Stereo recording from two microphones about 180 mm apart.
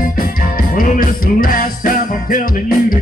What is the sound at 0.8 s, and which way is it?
Music, 50° left (ahead or behind).